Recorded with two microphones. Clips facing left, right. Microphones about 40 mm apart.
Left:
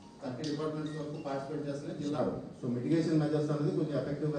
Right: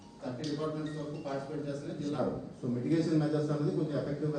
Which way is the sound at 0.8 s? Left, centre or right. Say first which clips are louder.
Even; left.